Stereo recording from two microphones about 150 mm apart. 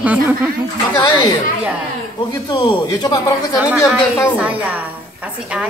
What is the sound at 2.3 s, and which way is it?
A man's voice, 30° left (ahead or behind).